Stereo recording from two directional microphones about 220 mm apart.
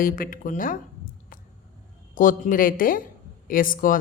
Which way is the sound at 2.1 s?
40° left (ahead or behind).